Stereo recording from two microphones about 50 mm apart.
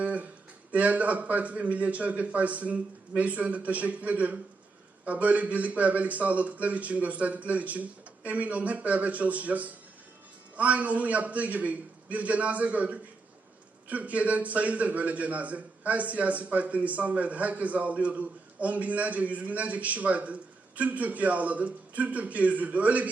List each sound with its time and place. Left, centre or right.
0.0 s music: right
0.7 s a man's voice: right